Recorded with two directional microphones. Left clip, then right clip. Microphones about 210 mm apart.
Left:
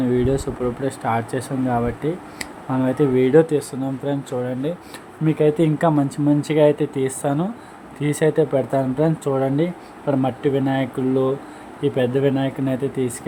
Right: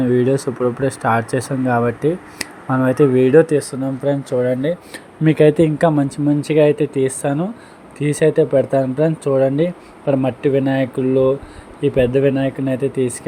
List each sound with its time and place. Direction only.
0.0 s speech: 15° right (ahead or behind)
5.6 s speech: 10° right (ahead or behind)